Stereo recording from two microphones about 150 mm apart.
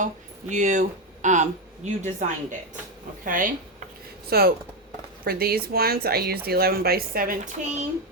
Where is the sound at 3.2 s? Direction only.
65° right (ahead or behind).